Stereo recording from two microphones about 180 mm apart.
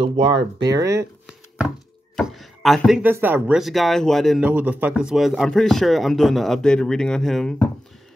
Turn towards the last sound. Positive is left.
turn(degrees=5)  # may be behind; listen again after turning